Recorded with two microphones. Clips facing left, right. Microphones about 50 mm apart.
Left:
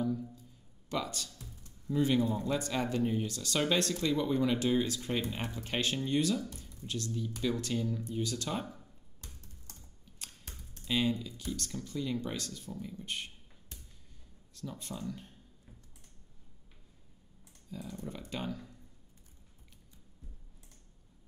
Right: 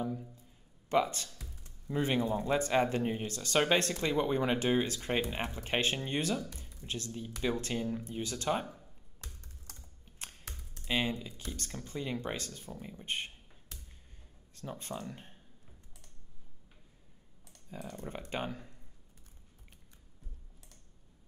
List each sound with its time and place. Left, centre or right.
0.0 s a sound: right
1.9 s speech: right
10.0 s typing: right
10.9 s speech: right
14.5 s speech: right
17.6 s speech: right
18.3 s speech: right